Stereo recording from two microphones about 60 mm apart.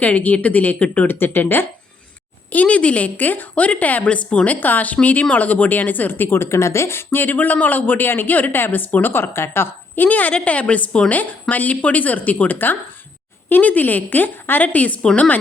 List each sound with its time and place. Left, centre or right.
0.0 s a woman's voice: left
2.5 s a woman's voice: left
9.9 s a woman's voice: left